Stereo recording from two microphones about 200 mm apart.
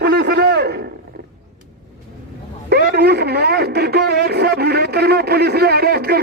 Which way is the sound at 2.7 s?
50° right (ahead or behind).